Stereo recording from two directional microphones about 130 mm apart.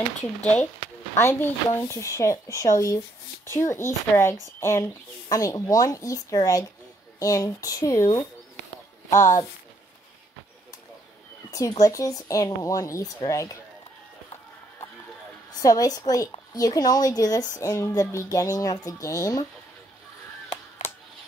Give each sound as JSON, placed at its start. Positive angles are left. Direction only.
{"t": 0.4, "sound": "speech", "side_deg": 10}
{"t": 11.5, "sound": "speech", "side_deg": 25}
{"t": 15.6, "sound": "speech", "side_deg": 25}